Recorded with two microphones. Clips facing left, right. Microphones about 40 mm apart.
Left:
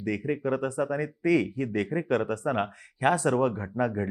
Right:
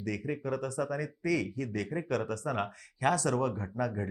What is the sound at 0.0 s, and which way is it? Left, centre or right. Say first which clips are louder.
Speech: left 6 dB; left.